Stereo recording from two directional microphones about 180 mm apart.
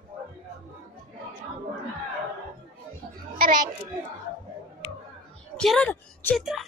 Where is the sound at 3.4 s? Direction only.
45° right (ahead or behind).